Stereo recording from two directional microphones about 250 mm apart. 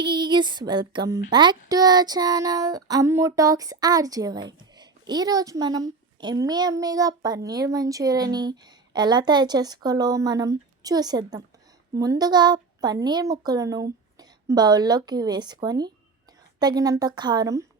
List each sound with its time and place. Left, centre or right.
0.0 s speech: centre